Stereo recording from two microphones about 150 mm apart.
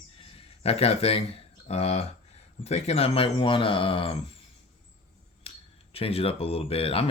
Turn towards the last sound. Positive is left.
turn(degrees=40)  # may be behind; listen again after turning